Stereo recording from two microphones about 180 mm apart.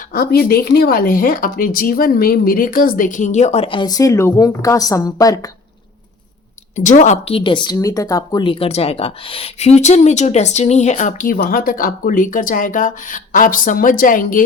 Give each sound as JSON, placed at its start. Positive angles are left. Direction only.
{"t": 0.1, "sound": "speech", "side_deg": 55}
{"t": 6.7, "sound": "speech", "side_deg": 40}